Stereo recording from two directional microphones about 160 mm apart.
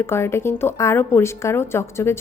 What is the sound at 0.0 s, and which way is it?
A woman's voice, 15° left (ahead or behind).